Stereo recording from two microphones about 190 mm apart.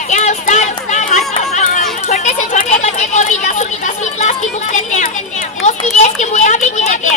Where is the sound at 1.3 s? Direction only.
40° left (ahead or behind).